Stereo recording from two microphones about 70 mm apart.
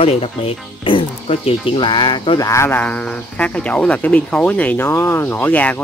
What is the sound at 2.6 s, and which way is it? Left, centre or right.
Speech, left.